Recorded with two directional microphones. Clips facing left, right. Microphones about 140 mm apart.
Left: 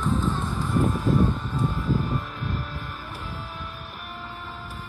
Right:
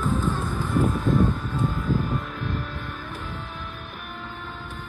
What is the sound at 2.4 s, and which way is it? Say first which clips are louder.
Music: right 2 dB; centre (ahead or behind).